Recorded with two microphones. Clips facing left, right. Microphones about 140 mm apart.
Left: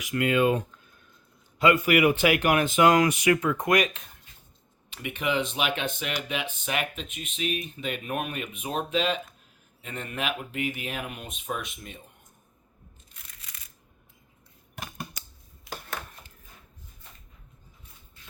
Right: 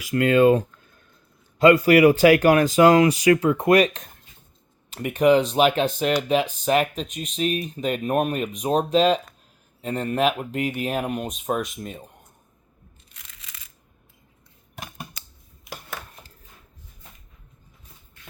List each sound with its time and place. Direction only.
0.1 s speech: 35° right (ahead or behind)
13.1 s crushing: 90° right
15.7 s a sound: 20° right (ahead or behind)